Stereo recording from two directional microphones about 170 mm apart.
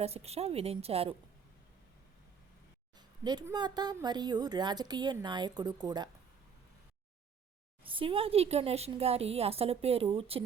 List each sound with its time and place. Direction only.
0.0 s speech: 35° right (ahead or behind)
3.4 s a woman's voice: 25° right (ahead or behind)
7.9 s speech: 30° right (ahead or behind)